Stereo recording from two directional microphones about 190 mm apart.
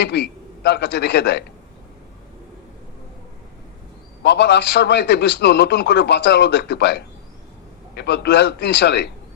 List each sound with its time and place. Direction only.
0.0 s a man's voice: 60° left (ahead or behind)
4.2 s a man's voice: 65° left (ahead or behind)